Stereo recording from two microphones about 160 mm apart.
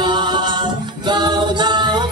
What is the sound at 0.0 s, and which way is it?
A capella, 30° right (ahead or behind).